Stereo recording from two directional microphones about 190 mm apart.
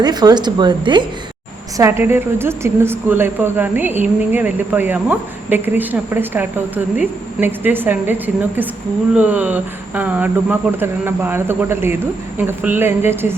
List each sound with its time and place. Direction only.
0.0 s a woman's voice: 20° right (ahead or behind)
9.1 s a woman's voice: 10° right (ahead or behind)